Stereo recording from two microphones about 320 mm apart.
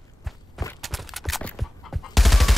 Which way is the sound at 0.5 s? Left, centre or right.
Centre.